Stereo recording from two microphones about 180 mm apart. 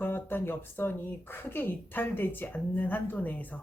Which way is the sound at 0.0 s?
10° left (ahead or behind).